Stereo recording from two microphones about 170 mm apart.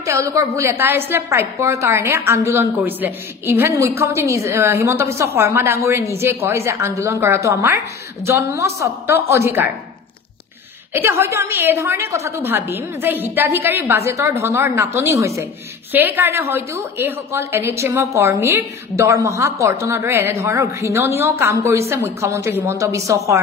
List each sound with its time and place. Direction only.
0.0 s a woman's voice: 15° right (ahead or behind)
10.9 s a woman's voice: 15° right (ahead or behind)